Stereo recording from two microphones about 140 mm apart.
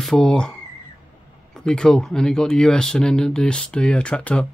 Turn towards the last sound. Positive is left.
turn(degrees=10)  # may be behind; listen again after turning